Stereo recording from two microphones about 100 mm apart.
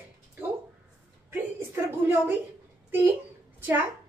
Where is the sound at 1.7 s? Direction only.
25° right (ahead or behind).